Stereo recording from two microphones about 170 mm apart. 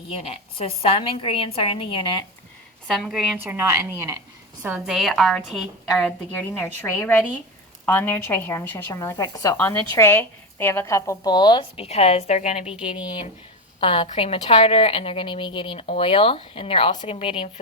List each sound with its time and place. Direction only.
0.1 s a woman's voice: 35° left (ahead or behind)
2.8 s a woman's voice: 5° left (ahead or behind)
3.4 s a woman's voice: 15° right (ahead or behind)
4.6 s a woman's voice: 5° right (ahead or behind)
6.5 s speech: 15° left (ahead or behind)
11.9 s a woman's voice: 40° left (ahead or behind)
13.7 s a woman's voice: 35° left (ahead or behind)